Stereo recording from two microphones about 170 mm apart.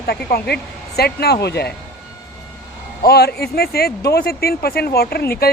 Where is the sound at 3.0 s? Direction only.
70° left (ahead or behind).